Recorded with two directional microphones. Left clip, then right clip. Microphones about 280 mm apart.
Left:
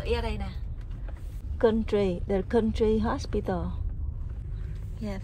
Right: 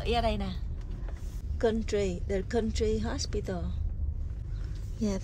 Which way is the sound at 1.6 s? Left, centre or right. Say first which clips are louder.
Left 4 dB; centre.